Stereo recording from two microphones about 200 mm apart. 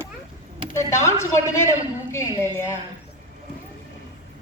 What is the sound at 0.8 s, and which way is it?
A woman's voice, 15° left (ahead or behind).